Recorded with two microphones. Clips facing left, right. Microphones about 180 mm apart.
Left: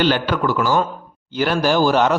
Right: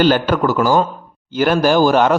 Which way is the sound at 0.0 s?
45° right (ahead or behind).